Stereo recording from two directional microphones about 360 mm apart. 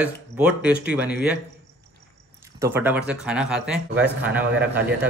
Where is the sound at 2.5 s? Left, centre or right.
Centre.